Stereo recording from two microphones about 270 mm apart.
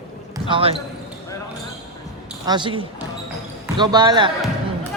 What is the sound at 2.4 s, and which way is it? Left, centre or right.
A man's voice, centre.